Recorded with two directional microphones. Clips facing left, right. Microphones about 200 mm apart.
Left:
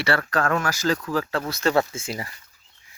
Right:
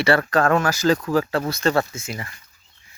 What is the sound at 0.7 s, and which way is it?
Speech, 20° right (ahead or behind).